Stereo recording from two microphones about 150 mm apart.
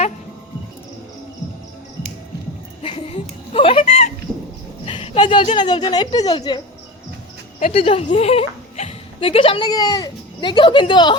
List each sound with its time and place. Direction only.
2.8 s chuckle: 40° left (ahead or behind)
4.9 s a sound: 35° left (ahead or behind)
5.4 s speech: 30° left (ahead or behind)
7.7 s a woman's voice: 40° left (ahead or behind)
9.6 s speech: 25° left (ahead or behind)